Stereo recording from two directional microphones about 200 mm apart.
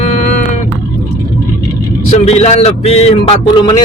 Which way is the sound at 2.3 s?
30° left (ahead or behind).